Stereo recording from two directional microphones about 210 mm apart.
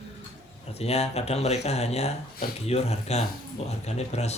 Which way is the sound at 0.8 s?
30° left (ahead or behind).